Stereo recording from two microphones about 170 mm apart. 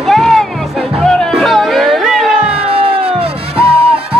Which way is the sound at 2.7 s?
30° right (ahead or behind).